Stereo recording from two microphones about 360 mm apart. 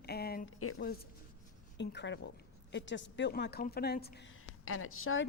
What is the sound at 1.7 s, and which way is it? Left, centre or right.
A woman's voice, left.